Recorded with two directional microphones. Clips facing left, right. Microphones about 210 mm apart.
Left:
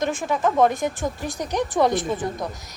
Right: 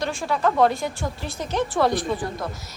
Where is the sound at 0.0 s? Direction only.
20° left (ahead or behind).